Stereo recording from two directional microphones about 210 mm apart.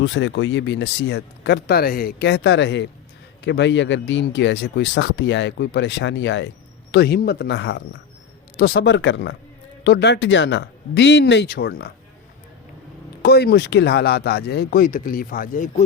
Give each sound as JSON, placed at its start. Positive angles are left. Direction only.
{"t": 0.0, "sound": "speech", "side_deg": 60}
{"t": 13.2, "sound": "speech", "side_deg": 50}